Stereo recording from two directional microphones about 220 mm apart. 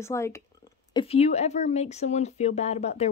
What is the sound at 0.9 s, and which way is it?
Speech, 25° left (ahead or behind).